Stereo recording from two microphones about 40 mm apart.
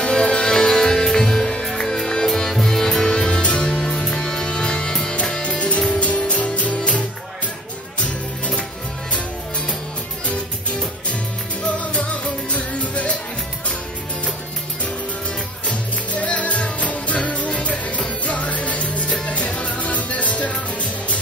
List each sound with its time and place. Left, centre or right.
0.0 s music: left
3.4 s music: left
3.7 s music: centre; by 6.8 s left
10.2 s music: left
15.7 s music: left